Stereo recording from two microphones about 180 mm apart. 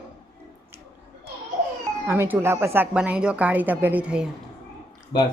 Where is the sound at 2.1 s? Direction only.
10° right (ahead or behind).